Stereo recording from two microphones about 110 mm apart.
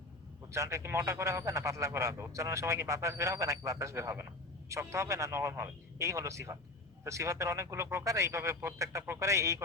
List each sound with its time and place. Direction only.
0.5 s speech: 25° right (ahead or behind)